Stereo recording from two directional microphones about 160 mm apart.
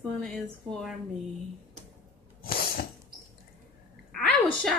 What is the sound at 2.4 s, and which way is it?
Sneeze, 70° left (ahead or behind).